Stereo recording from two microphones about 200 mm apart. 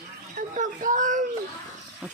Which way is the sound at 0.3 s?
40° right (ahead or behind).